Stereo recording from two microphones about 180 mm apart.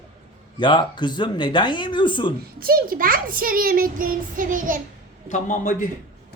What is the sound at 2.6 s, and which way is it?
A child's voice, 55° right (ahead or behind).